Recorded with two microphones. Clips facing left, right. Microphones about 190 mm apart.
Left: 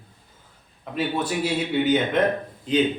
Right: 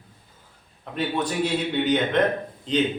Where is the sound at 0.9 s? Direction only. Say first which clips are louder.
Even; 5° left (ahead or behind).